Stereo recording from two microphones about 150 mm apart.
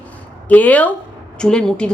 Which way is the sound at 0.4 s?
10° left (ahead or behind).